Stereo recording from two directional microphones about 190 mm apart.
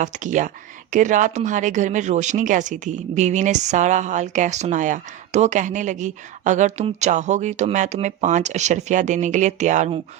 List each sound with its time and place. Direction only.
0.0 s speech: 40° right (ahead or behind)